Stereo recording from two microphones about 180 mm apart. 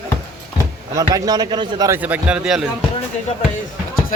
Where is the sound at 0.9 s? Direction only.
20° right (ahead or behind); by 2.7 s 5° right (ahead or behind).